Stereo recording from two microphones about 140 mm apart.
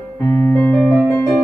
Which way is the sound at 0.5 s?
15° left (ahead or behind).